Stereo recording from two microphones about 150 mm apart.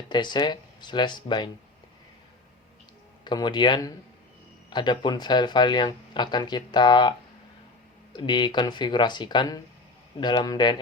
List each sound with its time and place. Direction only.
0.1 s speech: 30° left (ahead or behind)
3.2 s speech: 30° left (ahead or behind)
8.1 s speech: 30° left (ahead or behind)